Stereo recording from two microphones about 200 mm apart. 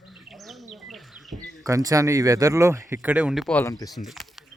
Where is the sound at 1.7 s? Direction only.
15° right (ahead or behind); by 3.7 s 5° left (ahead or behind).